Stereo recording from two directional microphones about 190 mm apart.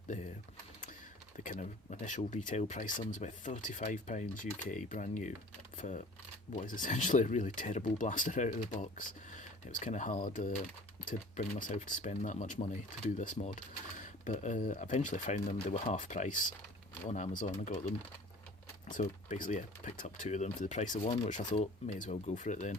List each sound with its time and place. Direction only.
1.5 s speech: 40° left (ahead or behind)
5.7 s typing: 40° left (ahead or behind)
6.5 s speech: 40° left (ahead or behind)
18.9 s speech: 45° left (ahead or behind)